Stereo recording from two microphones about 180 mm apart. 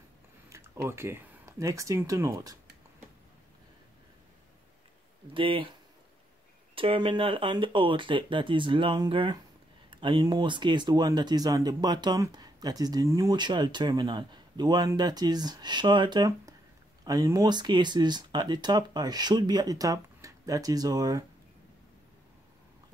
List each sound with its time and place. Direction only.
0.8 s speech: 15° right (ahead or behind)
5.3 s speech: 30° right (ahead or behind)
6.7 s speech: 30° right (ahead or behind)